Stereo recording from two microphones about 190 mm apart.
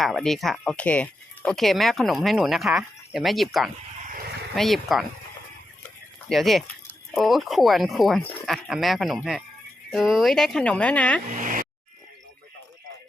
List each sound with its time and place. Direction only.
0.0 s speech: centre (ahead or behind)
6.2 s speech: centre (ahead or behind)
11.3 s a sound: 45° right (ahead or behind)